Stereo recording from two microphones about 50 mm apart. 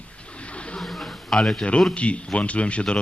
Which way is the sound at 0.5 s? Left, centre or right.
Left.